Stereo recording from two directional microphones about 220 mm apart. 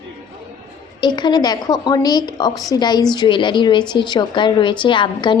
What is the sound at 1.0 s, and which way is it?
A woman's voice, 20° left (ahead or behind).